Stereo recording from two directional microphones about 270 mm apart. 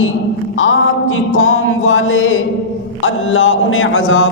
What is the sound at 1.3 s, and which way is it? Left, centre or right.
A man's voice, left.